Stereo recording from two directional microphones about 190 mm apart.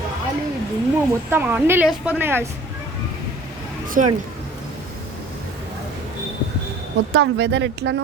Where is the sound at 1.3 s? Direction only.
10° right (ahead or behind).